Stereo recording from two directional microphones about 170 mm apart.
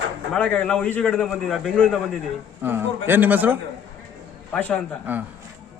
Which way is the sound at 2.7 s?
10° right (ahead or behind).